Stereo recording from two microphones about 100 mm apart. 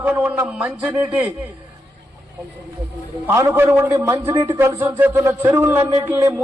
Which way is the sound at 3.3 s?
25° right (ahead or behind).